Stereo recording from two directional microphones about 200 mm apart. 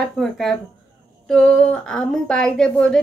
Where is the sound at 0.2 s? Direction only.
Centre (ahead or behind).